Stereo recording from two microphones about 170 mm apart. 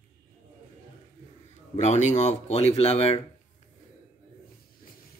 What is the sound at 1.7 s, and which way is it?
Speech, 45° left (ahead or behind).